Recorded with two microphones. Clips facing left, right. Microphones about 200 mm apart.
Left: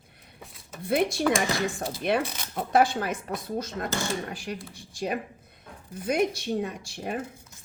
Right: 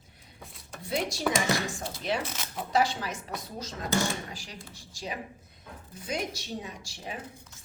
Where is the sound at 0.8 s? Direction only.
55° left (ahead or behind).